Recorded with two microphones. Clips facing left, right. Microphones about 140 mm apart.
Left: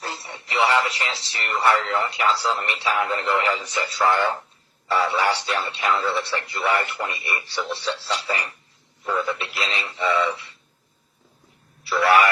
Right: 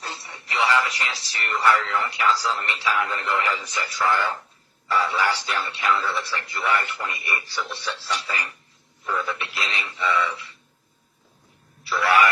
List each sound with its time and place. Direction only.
0.1 s speech: 25° left (ahead or behind)